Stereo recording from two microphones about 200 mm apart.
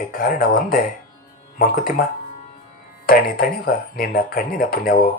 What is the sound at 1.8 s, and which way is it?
Speech, 45° left (ahead or behind).